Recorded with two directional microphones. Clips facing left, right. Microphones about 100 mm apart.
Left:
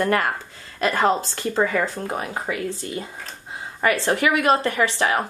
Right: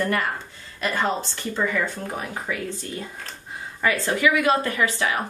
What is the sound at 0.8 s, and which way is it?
Speech, 40° left (ahead or behind).